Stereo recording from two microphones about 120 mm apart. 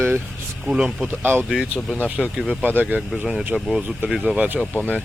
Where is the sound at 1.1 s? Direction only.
15° right (ahead or behind).